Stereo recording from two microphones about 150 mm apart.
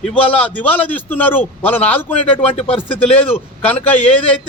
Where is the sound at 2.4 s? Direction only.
40° left (ahead or behind).